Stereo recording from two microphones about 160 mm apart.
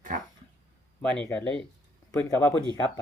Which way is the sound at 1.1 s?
10° left (ahead or behind).